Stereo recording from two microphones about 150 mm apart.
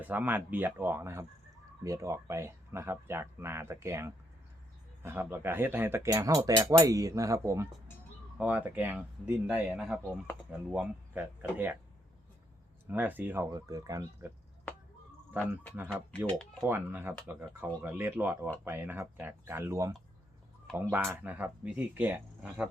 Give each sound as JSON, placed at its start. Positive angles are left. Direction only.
{"t": 0.0, "sound": "speech", "side_deg": -10}
{"t": 12.9, "sound": "speech", "side_deg": -10}
{"t": 15.3, "sound": "speech", "side_deg": -10}
{"t": 15.9, "sound": "speech", "side_deg": 5}
{"t": 16.6, "sound": "speech", "side_deg": -15}
{"t": 20.9, "sound": "speech", "side_deg": -15}